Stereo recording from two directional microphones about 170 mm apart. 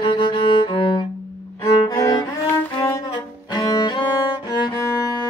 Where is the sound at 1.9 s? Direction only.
20° left (ahead or behind).